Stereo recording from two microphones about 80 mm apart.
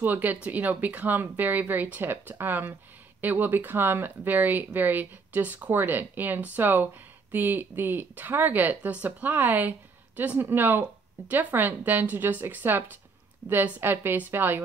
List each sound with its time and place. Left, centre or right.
0.0 s speech: right